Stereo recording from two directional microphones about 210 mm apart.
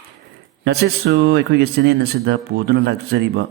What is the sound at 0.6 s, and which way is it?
A man's voice, 55° right (ahead or behind).